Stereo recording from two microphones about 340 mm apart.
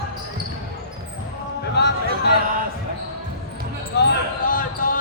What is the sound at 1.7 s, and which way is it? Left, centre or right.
Music, left.